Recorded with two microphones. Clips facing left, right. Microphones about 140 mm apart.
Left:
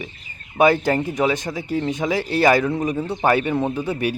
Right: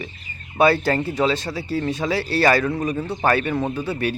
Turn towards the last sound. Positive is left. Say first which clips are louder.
# left 1 dB
turn(degrees=15)  # may be behind; listen again after turning